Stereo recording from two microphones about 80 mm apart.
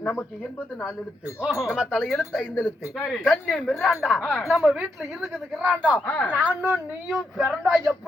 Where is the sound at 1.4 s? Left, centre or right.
Centre.